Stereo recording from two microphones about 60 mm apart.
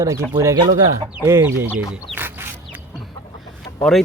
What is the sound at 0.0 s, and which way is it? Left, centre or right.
Speech, right.